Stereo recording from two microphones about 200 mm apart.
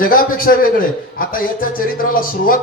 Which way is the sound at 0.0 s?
45° left (ahead or behind).